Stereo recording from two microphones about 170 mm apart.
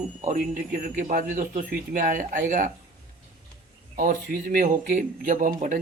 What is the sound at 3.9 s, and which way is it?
Speech, 55° right (ahead or behind).